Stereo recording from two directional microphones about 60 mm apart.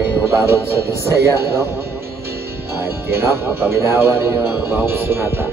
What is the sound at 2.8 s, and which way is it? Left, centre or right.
Speech, right.